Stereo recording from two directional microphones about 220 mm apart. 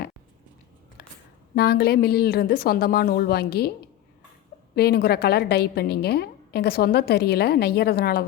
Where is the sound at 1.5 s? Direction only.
45° left (ahead or behind).